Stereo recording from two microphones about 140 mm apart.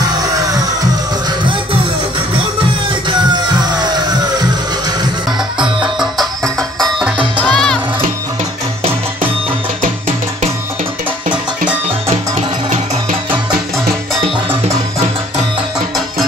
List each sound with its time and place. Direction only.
1.4 s music: 35° right (ahead or behind)
3.1 s music: 30° right (ahead or behind)
5.9 s music: centre (ahead or behind)
9.8 s music: 65° right (ahead or behind)